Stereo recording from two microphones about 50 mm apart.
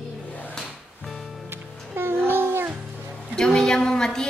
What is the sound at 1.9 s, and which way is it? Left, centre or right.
Music, right.